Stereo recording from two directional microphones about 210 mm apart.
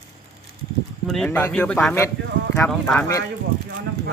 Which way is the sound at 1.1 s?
5° left (ahead or behind).